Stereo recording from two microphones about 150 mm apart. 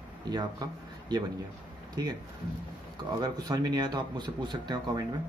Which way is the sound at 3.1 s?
25° right (ahead or behind).